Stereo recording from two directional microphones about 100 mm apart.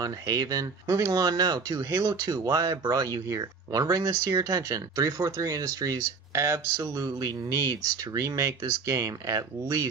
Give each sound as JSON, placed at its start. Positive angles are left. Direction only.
{"t": 0.0, "sound": "speech", "side_deg": -40}